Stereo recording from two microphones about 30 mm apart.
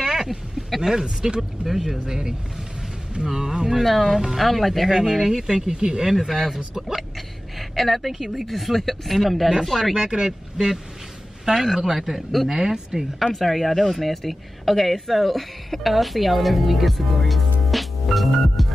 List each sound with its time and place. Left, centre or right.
0.0 s a sound: centre
1.2 s speech: right
1.7 s speech: centre
2.0 s speech: right
3.8 s speech: centre
5.1 s speech: centre
5.7 s speech: right
6.0 s speech: centre
7.7 s speech: centre
9.9 s speech: right
11.5 s speech: centre
12.4 s speech: centre
13.2 s a woman's voice: centre